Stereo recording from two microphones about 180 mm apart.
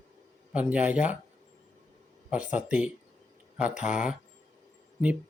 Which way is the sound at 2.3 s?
5° right (ahead or behind).